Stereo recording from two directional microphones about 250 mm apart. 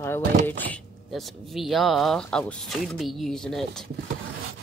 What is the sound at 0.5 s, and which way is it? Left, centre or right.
Speech, centre.